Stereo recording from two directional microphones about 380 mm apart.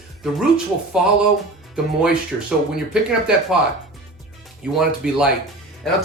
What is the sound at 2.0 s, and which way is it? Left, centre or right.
Speech, centre.